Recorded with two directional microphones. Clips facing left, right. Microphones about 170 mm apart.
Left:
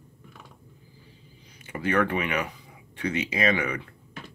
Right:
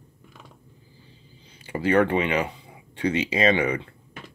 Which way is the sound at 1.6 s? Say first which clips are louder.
Right 5 dB; 30° right (ahead or behind).